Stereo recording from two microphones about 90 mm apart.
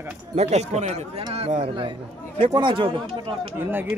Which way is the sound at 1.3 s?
90° right.